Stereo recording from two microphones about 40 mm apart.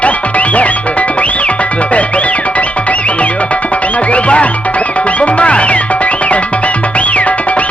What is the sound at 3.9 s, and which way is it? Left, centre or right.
Music, left.